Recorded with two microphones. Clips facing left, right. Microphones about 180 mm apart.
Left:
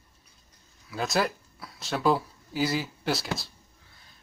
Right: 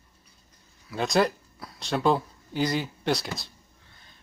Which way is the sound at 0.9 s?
Centre (ahead or behind).